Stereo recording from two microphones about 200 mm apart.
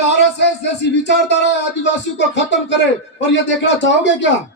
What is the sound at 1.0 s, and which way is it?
A man's voice, 60° left (ahead or behind).